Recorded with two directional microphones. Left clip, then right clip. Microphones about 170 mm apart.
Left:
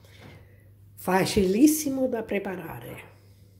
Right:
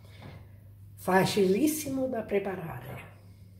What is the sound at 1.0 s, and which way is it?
A woman's voice, 45° left (ahead or behind).